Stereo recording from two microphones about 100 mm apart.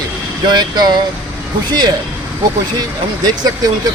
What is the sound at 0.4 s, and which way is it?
Speech, 45° right (ahead or behind).